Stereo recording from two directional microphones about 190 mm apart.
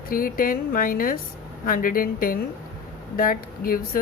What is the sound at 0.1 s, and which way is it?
A woman's voice, 50° left (ahead or behind).